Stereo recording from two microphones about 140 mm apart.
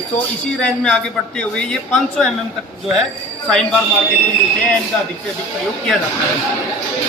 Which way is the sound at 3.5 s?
5° left (ahead or behind).